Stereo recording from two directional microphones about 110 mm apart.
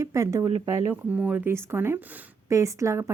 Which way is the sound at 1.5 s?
25° right (ahead or behind).